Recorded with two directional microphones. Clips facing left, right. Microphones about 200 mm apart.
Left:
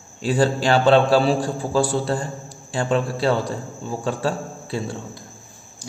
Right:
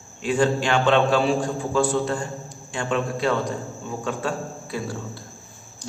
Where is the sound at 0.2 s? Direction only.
35° left (ahead or behind).